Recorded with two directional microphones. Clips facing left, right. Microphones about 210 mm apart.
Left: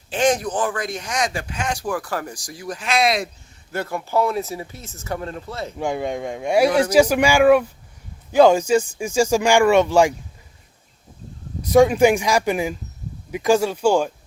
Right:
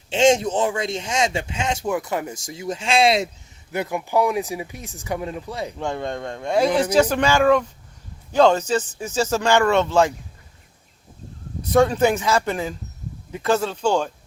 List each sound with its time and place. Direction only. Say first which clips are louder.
0.1 s speech: right 3 dB; 25° right (ahead or behind)
3.7 s speech: right 1 dB; 15° right (ahead or behind)
5.8 s speech: left 5 dB; 10° left (ahead or behind)
11.7 s speech: left 3 dB; 10° left (ahead or behind)